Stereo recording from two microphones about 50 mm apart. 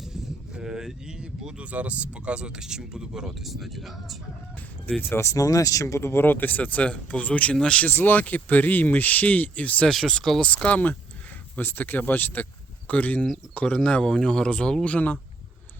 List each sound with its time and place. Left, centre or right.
0.0 s speech: centre
4.9 s speech: left
5.1 s speech: left; by 7.9 s centre
7.9 s speech: left
9.9 s speech: centre
10.4 s speech: left
11.5 s speech: left; by 14.8 s centre
14.8 s speech: left